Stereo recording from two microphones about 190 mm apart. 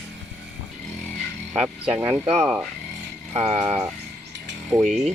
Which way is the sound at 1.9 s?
10° right (ahead or behind).